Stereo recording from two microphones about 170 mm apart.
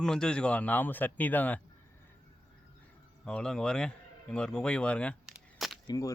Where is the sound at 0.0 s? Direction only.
5° left (ahead or behind).